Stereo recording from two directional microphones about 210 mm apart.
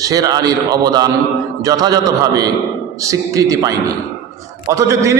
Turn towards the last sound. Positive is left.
turn(degrees=-15)  # may be behind; listen again after turning